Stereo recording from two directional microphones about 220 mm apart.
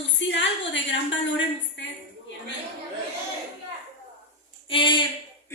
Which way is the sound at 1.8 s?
55° left (ahead or behind).